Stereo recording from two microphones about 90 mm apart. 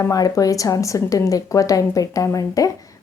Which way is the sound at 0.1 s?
40° left (ahead or behind).